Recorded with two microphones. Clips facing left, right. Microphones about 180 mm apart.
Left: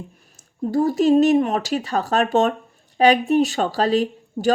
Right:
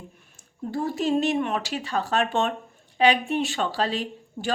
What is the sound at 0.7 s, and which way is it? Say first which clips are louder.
Speech: left 8 dB; 40° left (ahead or behind).